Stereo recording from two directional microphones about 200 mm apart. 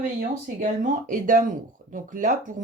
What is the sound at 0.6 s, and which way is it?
Speech, 40° right (ahead or behind).